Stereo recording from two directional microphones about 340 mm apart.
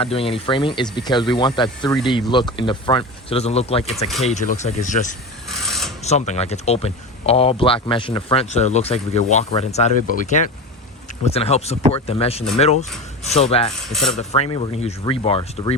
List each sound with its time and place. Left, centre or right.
0.0 s speech: centre
5.5 s a sound: centre
6.0 s speech: centre